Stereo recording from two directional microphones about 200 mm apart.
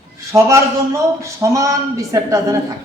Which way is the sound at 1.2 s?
15° right (ahead or behind).